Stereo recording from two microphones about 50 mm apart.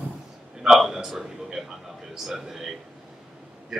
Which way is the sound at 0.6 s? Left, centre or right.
Centre.